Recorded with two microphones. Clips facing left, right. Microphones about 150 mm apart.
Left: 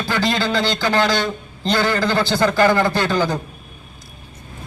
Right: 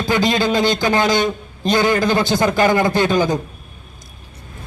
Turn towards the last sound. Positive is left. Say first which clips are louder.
# right 3 dB
turn(degrees=-15)  # may be behind; listen again after turning